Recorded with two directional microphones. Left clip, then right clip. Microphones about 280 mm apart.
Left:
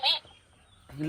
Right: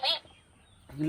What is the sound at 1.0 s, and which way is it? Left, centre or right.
Speech, centre.